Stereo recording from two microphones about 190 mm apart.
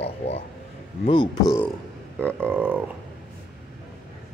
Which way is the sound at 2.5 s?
10° right (ahead or behind).